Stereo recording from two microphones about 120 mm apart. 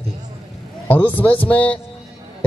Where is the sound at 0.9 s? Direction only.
15° left (ahead or behind).